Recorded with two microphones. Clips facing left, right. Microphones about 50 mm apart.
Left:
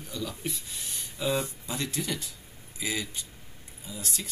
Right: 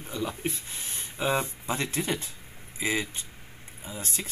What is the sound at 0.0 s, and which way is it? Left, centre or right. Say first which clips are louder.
Speech: right 4 dB; right.